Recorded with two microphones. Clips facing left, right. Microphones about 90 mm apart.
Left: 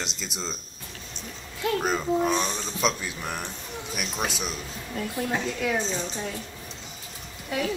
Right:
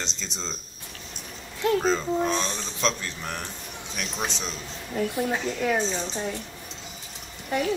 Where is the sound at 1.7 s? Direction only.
10° left (ahead or behind).